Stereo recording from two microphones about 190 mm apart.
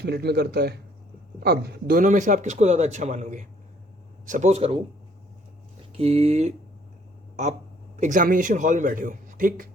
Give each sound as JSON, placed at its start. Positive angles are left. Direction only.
{"t": 0.0, "sound": "a man's voice", "side_deg": -60}
{"t": 6.0, "sound": "a man's voice", "side_deg": -30}
{"t": 7.9, "sound": "speech", "side_deg": -40}